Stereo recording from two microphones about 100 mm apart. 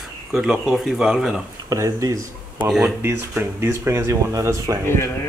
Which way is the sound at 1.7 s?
35° right (ahead or behind).